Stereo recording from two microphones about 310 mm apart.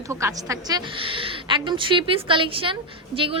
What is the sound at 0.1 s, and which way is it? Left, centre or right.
A woman's voice, centre.